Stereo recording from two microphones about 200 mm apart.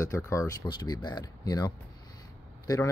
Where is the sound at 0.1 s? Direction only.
15° left (ahead or behind).